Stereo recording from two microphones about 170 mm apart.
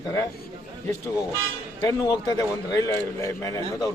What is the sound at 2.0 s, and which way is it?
A man's voice, 20° left (ahead or behind).